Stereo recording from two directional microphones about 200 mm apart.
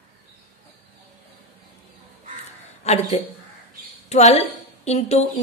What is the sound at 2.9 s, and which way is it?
A woman's voice, 30° left (ahead or behind).